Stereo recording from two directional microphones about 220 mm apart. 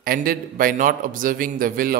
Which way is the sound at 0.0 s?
40° right (ahead or behind).